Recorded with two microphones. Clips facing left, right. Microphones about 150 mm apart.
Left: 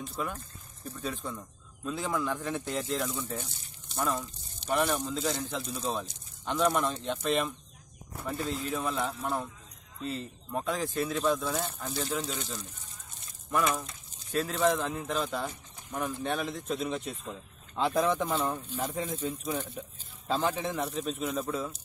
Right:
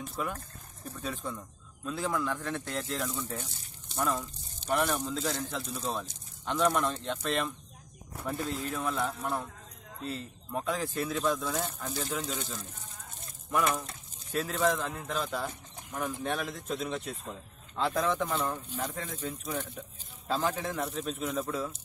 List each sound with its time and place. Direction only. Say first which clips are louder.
0.1 s speech: even; centre (ahead or behind)
14.5 s speech: left 1 dB; 5° left (ahead or behind)